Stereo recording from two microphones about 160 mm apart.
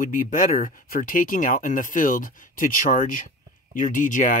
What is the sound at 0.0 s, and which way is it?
Speech, 60° left (ahead or behind).